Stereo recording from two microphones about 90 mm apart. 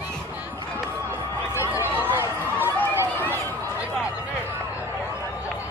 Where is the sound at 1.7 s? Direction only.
20° right (ahead or behind).